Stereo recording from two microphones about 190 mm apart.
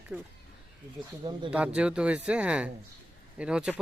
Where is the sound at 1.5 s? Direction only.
5° right (ahead or behind).